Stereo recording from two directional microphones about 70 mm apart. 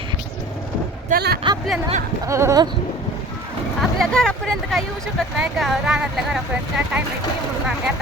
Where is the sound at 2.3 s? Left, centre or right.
Right.